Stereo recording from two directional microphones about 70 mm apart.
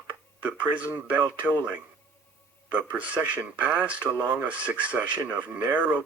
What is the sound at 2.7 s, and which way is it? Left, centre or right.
Speech, right.